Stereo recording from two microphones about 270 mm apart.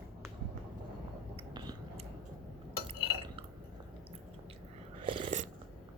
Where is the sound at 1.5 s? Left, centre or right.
Centre.